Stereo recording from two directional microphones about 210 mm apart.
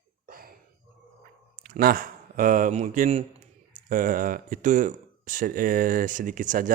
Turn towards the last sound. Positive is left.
turn(degrees=-40)  # may be behind; listen again after turning